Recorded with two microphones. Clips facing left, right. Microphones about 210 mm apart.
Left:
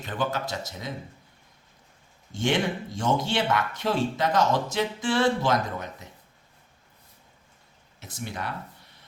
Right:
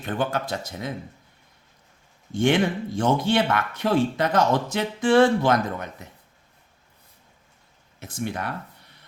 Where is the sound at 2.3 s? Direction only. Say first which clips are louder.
Right 5 dB; 55° right (ahead or behind).